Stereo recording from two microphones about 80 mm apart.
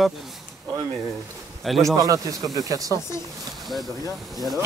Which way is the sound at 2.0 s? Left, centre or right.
Right.